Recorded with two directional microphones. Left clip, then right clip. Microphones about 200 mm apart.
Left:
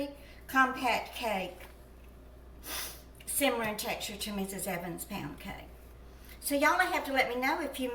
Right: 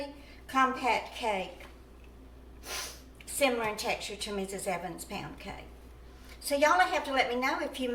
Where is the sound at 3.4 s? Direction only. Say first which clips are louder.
Right 2 dB; 25° right (ahead or behind).